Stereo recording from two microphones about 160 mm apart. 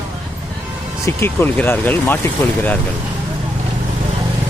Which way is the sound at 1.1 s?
15° left (ahead or behind).